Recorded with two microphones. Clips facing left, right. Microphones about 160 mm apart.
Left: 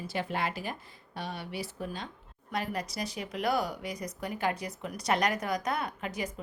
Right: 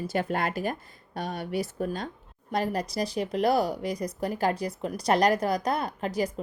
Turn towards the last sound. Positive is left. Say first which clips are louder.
# right 6 dB
turn(degrees=-35)  # may be behind; listen again after turning